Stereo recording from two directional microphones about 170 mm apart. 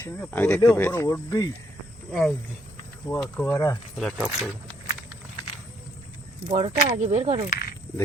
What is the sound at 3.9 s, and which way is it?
Speech, centre (ahead or behind).